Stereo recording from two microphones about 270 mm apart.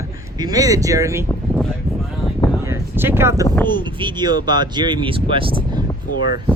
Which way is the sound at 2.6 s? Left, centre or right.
Centre.